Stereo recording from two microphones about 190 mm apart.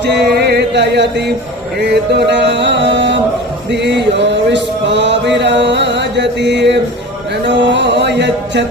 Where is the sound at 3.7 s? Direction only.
65° right (ahead or behind).